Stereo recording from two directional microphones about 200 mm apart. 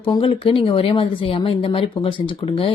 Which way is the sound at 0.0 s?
25° left (ahead or behind).